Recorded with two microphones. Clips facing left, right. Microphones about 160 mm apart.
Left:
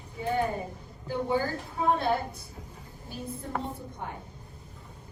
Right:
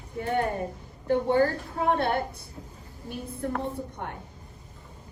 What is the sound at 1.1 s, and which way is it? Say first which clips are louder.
A woman's voice: right 6 dB; 65° right (ahead or behind).